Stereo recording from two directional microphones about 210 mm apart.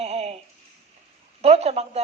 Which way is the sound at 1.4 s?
30° right (ahead or behind).